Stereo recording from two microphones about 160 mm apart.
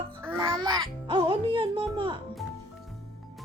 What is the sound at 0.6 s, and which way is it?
Speech, 30° right (ahead or behind).